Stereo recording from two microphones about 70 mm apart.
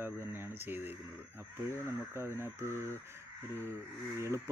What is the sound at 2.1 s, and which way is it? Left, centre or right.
Speech, right.